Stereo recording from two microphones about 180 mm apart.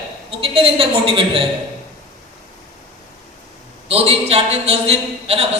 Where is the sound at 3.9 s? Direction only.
35° right (ahead or behind).